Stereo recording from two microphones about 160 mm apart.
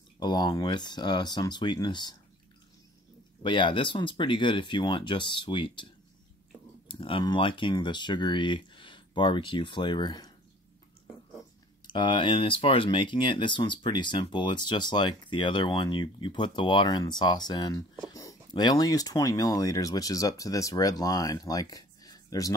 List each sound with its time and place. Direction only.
0.2 s speech: 30° left (ahead or behind)
3.4 s speech: 30° left (ahead or behind)
6.9 s speech: 30° left (ahead or behind)
11.9 s speech: 30° left (ahead or behind)